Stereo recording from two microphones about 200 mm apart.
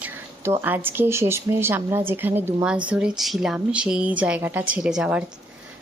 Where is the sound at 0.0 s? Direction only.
10° right (ahead or behind).